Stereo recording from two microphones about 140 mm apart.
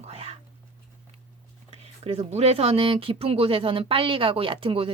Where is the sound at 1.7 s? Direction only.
45° right (ahead or behind).